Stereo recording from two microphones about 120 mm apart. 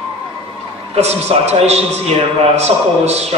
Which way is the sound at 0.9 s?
65° right (ahead or behind).